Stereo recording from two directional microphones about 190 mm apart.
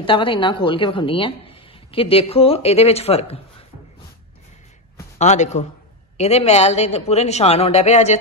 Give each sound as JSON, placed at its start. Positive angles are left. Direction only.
{"t": 0.0, "sound": "speech", "side_deg": 25}
{"t": 5.2, "sound": "speech", "side_deg": 35}